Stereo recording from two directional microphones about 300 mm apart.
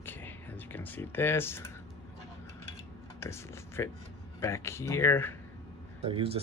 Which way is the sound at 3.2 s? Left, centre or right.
Centre.